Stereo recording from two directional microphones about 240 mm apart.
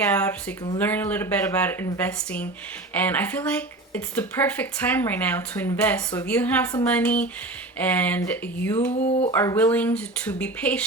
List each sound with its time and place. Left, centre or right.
0.0 s speech: centre
8.9 s a sound: left
9.3 s speech: centre